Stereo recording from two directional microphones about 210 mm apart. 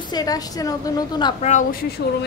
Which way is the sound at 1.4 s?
35° left (ahead or behind).